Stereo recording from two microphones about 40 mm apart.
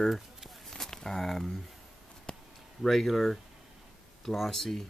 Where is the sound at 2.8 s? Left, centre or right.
Centre.